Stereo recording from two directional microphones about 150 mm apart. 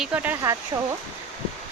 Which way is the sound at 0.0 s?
10° right (ahead or behind).